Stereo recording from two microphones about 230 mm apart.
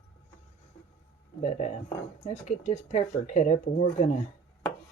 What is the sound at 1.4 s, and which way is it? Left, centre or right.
Speech, left.